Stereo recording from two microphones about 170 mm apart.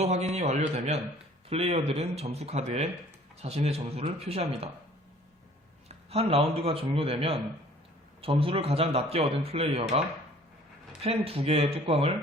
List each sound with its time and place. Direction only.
0.0 s a man's voice: 40° right (ahead or behind)
5.9 s a man's voice: 35° right (ahead or behind)
11.0 s a man's voice: 35° right (ahead or behind)